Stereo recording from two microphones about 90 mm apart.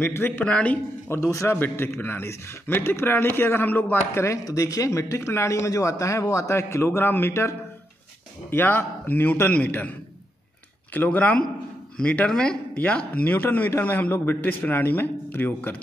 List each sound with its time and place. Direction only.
0.0 s a man's voice: 25° left (ahead or behind)
1.0 s a man's voice: 30° left (ahead or behind)